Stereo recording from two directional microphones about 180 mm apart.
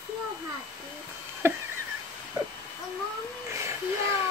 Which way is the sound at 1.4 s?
10° right (ahead or behind).